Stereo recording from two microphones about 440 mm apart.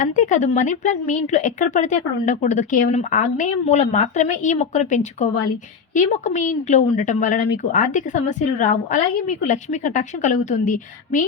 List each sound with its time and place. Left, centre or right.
0.0 s speech: centre